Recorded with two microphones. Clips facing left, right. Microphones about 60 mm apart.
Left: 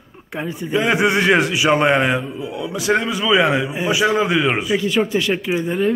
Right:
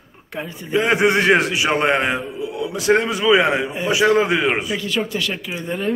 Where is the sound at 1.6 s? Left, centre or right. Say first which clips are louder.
Left 3 dB; centre.